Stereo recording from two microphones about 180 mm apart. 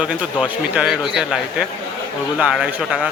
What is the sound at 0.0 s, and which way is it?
Speech, 5° right (ahead or behind).